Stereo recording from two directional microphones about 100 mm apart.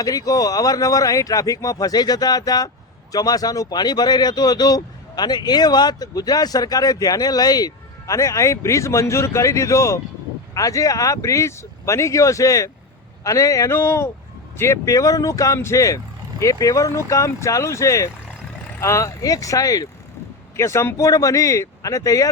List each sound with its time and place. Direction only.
0.0 s speech: 35° left (ahead or behind)